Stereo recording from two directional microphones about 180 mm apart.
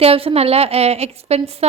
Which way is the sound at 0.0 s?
35° right (ahead or behind).